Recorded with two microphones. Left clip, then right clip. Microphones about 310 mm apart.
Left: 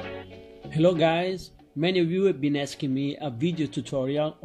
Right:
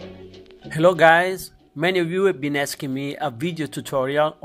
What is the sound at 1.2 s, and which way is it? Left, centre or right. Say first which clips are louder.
Speech: right 6 dB; centre.